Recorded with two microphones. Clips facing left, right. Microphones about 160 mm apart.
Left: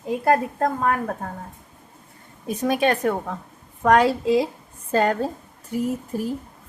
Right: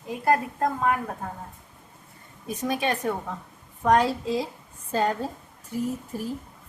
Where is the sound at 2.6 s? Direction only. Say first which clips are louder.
Left 6 dB; 65° left (ahead or behind).